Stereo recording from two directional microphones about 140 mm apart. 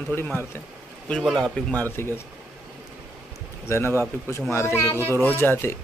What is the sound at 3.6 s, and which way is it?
A man's voice, 20° left (ahead or behind).